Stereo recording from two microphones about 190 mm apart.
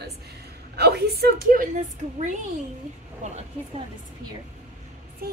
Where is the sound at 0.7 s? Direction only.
55° right (ahead or behind); by 2.3 s 40° right (ahead or behind).